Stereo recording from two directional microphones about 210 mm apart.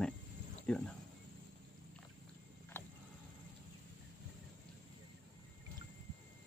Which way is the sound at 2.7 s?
10° left (ahead or behind).